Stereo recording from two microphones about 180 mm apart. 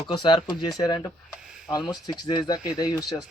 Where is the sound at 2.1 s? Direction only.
20° left (ahead or behind).